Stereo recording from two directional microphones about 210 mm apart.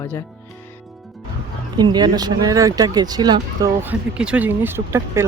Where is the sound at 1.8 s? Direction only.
20° right (ahead or behind).